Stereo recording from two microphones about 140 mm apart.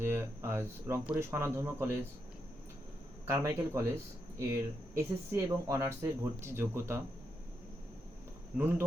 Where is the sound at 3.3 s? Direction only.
20° right (ahead or behind).